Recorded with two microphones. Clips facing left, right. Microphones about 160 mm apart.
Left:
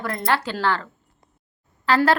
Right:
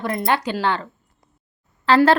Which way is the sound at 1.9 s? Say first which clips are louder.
Right 4 dB; 25° right (ahead or behind).